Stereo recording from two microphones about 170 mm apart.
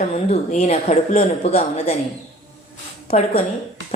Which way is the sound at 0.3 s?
40° left (ahead or behind).